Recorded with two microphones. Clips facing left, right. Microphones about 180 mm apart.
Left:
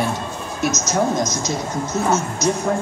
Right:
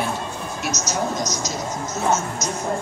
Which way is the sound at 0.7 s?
50° left (ahead or behind).